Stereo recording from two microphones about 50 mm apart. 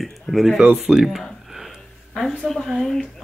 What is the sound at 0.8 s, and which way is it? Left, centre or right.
Speech, centre.